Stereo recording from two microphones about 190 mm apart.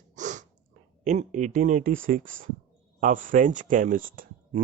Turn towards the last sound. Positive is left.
turn(degrees=-50)  # may be behind; listen again after turning